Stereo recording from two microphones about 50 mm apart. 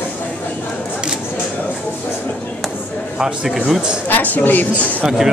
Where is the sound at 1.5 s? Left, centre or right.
Left.